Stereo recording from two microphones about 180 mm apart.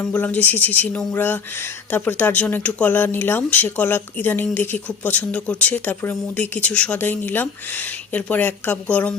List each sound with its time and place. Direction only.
0.0 s speech: 10° left (ahead or behind)